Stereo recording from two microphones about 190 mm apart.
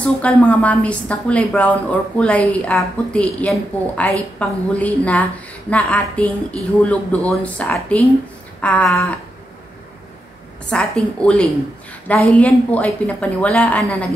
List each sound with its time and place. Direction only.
0.0 s a woman's voice: 5° left (ahead or behind)
8.5 s a sound: 10° left (ahead or behind)
10.7 s a woman's voice: 5° left (ahead or behind)